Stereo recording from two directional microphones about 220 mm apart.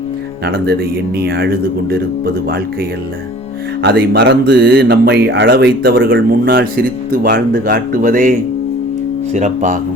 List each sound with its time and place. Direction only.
0.4 s speech: 45° right (ahead or behind)
3.8 s speech: 50° right (ahead or behind); by 9.7 s 35° right (ahead or behind)